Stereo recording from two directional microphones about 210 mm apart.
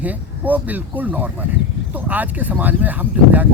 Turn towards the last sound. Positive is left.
turn(degrees=-10)  # may be behind; listen again after turning